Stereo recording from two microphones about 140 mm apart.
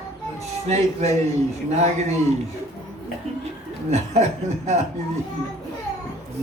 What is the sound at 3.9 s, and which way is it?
Speech, 50° right (ahead or behind).